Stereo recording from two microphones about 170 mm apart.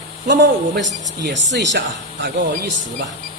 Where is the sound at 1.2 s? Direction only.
90° right.